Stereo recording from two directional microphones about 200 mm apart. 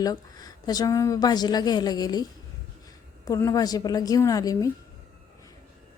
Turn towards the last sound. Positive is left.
turn(degrees=15)  # may be behind; listen again after turning